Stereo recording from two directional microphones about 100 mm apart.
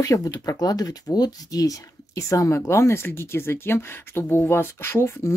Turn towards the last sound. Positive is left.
turn(degrees=25)  # may be behind; listen again after turning